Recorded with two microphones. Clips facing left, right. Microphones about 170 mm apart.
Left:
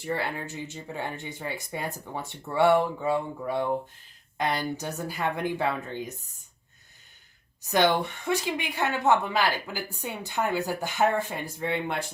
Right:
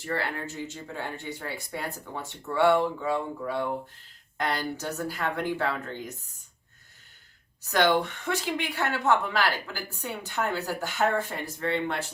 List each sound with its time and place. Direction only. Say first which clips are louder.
0.0 s speech: left 1 dB; 15° left (ahead or behind)
7.7 s speech: even; 15° left (ahead or behind)